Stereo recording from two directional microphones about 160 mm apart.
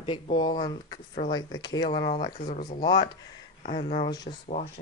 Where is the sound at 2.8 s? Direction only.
25° left (ahead or behind).